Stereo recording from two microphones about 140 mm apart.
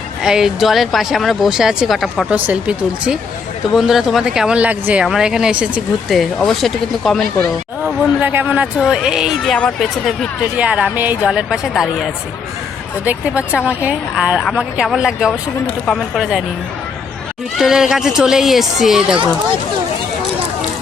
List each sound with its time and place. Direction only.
0.2 s speech: 5° right (ahead or behind)
7.9 s speech: 15° right (ahead or behind)
8.8 s speech: 5° right (ahead or behind)
13.7 s speech: 10° right (ahead or behind)
17.6 s speech: 5° right (ahead or behind)